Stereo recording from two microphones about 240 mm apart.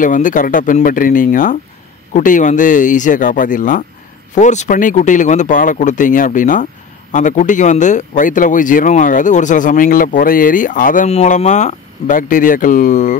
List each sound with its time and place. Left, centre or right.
0.0 s speech: left